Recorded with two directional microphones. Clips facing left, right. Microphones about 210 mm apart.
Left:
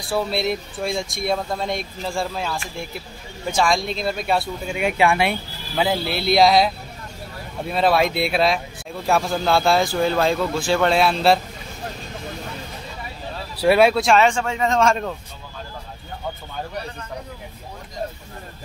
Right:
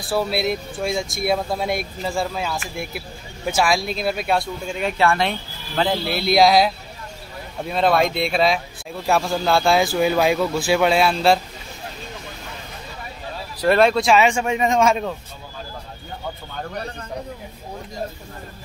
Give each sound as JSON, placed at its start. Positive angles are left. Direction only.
{"t": 0.0, "sound": "speech", "side_deg": 0}
{"t": 13.6, "sound": "speech", "side_deg": 5}